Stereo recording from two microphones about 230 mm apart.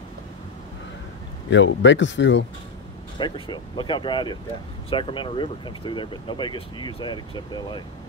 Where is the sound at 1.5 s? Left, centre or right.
Left.